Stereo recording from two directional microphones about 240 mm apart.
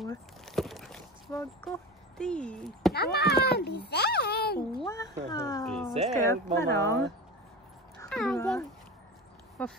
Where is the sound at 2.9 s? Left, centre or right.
Left.